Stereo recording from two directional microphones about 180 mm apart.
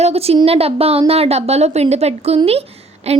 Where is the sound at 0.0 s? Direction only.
35° right (ahead or behind).